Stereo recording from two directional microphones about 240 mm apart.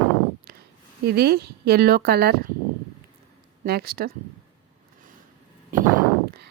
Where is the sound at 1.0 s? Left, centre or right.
Right.